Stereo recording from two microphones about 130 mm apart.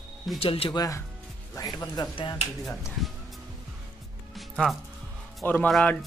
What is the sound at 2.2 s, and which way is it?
Speech, 40° left (ahead or behind).